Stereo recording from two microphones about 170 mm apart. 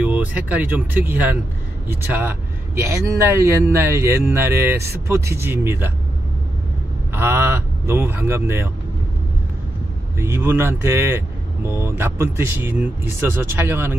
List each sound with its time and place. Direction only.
0.0 s speech: 10° right (ahead or behind)
2.9 s speech: 15° right (ahead or behind)
7.2 s speech: 15° right (ahead or behind)
10.1 s speech: 15° right (ahead or behind)